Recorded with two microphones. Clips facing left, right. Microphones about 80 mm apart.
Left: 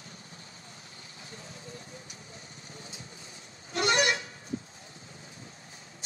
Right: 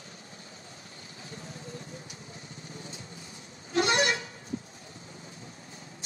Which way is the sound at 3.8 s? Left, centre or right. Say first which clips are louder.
Even; left.